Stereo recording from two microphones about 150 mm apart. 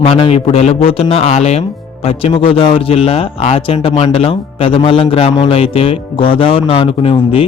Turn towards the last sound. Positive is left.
turn(degrees=35)  # may be behind; listen again after turning